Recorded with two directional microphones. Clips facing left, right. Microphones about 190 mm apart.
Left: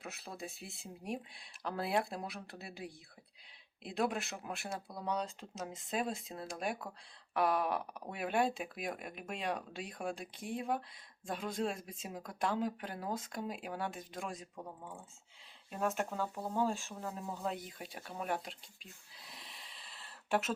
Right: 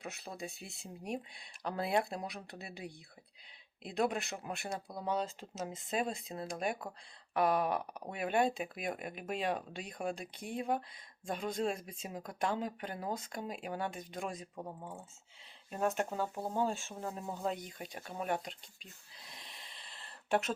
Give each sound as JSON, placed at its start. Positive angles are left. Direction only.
{"t": 0.0, "sound": "speech", "side_deg": 0}
{"t": 14.5, "sound": "speech", "side_deg": -15}
{"t": 16.5, "sound": "speech", "side_deg": 0}